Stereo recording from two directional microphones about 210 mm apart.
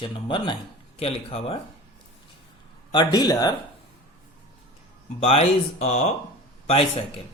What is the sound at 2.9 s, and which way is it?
Speech, 20° left (ahead or behind).